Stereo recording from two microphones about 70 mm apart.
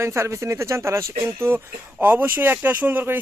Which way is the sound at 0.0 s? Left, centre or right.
Right.